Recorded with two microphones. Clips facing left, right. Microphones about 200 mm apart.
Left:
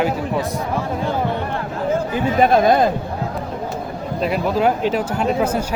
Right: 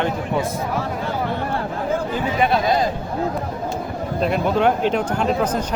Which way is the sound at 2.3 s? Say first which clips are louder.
Left 5 dB; 50° left (ahead or behind).